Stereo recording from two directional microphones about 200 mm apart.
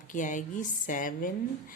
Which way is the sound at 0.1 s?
40° left (ahead or behind).